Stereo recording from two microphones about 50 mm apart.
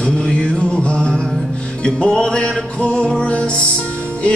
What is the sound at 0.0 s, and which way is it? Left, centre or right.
Music, centre.